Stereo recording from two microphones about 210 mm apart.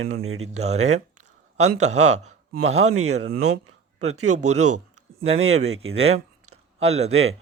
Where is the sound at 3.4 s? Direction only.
80° right.